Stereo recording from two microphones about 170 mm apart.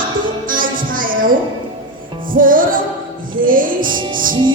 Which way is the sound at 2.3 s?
55° right (ahead or behind).